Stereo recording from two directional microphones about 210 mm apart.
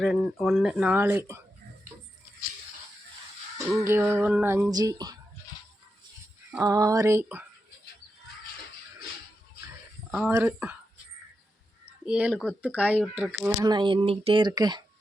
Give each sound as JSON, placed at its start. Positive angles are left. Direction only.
{"t": 0.0, "sound": "speech", "side_deg": 0}
{"t": 3.7, "sound": "music", "side_deg": -10}
{"t": 6.5, "sound": "music", "side_deg": -15}
{"t": 10.1, "sound": "music", "side_deg": -5}
{"t": 12.0, "sound": "speech", "side_deg": -5}
{"t": 13.7, "sound": "a woman's voice", "side_deg": -20}